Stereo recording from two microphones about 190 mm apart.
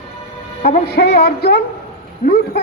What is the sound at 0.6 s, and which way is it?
A woman's voice, 55° left (ahead or behind).